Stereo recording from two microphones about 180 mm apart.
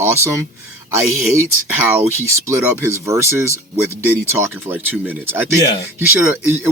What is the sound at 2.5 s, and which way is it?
Speech, 15° right (ahead or behind).